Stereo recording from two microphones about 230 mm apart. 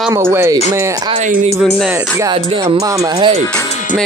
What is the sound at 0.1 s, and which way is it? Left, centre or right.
Speech, centre.